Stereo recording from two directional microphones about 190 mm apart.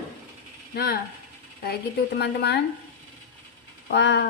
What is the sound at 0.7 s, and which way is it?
A woman's voice, 50° left (ahead or behind).